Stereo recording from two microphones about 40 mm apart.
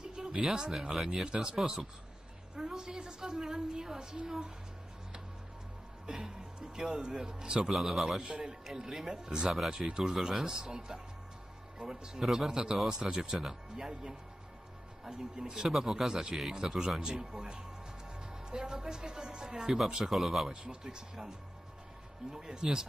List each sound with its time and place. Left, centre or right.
0.0 s a sound: centre
0.4 s speech: centre
6.1 s speech: centre
7.7 s a man's voice: centre
8.4 s speech: centre
20.5 s speech: centre